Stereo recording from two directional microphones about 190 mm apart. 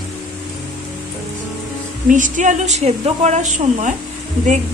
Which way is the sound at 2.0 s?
40° right (ahead or behind).